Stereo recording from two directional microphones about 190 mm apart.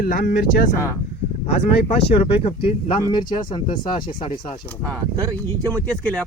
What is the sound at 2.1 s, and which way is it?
Speech, 30° left (ahead or behind).